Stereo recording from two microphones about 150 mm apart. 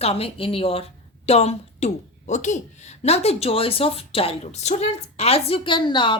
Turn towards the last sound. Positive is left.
turn(degrees=30)  # may be behind; listen again after turning